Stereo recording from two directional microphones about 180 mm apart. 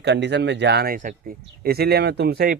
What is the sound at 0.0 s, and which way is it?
Speech, 75° right (ahead or behind).